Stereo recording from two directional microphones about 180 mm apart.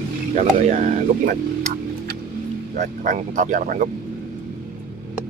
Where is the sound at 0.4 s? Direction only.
40° right (ahead or behind).